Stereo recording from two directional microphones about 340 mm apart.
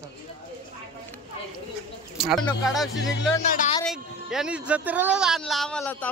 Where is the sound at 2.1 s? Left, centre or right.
Centre.